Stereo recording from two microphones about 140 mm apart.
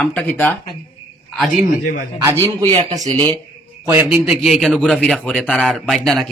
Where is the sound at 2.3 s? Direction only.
20° left (ahead or behind).